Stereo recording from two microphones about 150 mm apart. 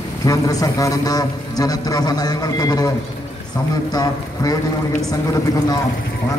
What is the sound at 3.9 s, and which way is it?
Speech, 25° left (ahead or behind).